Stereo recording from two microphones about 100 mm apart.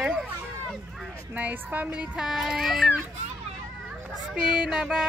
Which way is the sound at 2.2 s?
5° right (ahead or behind).